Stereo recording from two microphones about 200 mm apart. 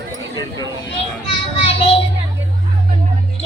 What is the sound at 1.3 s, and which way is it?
Child singing, 30° left (ahead or behind).